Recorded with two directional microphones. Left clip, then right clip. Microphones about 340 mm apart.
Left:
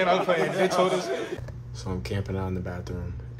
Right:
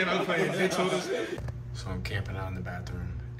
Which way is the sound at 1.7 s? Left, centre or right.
Centre.